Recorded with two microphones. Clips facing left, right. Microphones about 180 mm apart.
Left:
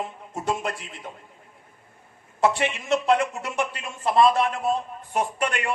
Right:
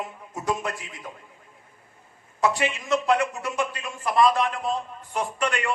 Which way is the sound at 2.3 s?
30° left (ahead or behind).